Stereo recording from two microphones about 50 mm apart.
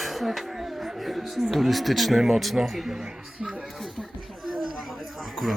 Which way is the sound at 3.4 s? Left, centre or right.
Right.